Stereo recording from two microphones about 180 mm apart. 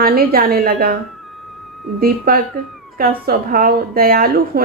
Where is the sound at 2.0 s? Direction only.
55° right (ahead or behind).